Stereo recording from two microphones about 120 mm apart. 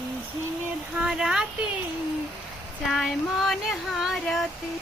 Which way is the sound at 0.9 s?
5° right (ahead or behind).